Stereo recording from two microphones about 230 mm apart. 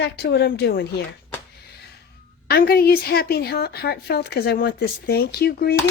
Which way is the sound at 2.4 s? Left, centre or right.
Left.